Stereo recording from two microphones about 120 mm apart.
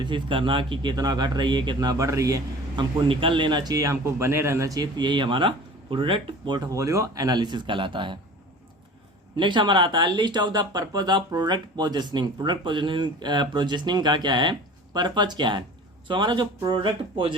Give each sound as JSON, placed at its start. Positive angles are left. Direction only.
{"t": 0.0, "sound": "a man's voice", "side_deg": -45}
{"t": 2.7, "sound": "a man's voice", "side_deg": -45}
{"t": 9.3, "sound": "a man's voice", "side_deg": -40}